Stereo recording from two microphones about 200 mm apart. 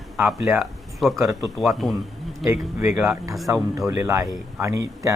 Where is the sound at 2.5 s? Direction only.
10° right (ahead or behind).